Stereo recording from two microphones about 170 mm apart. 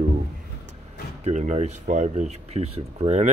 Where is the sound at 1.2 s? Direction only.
40° right (ahead or behind).